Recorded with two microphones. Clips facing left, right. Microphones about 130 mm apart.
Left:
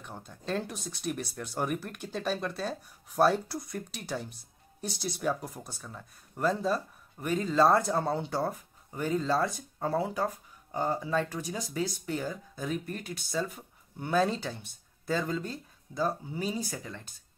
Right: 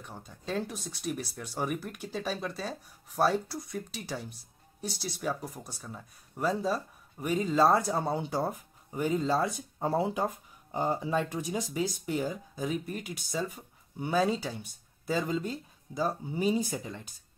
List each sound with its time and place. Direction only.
0.0 s speech: centre (ahead or behind); by 17.0 s 20° right (ahead or behind)